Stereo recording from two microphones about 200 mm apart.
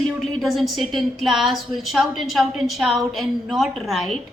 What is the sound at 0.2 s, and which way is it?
A woman's voice, centre (ahead or behind).